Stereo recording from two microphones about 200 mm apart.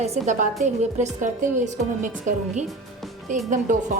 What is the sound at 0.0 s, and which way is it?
A woman's voice, 35° right (ahead or behind).